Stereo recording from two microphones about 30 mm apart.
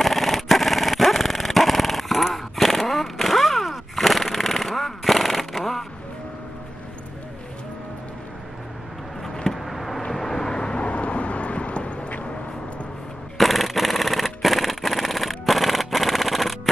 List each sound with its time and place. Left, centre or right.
0.0 s dog: centre
9.2 s vehicle: centre
9.6 s vehicle: centre
10.6 s vehicle: left
13.4 s a sound: centre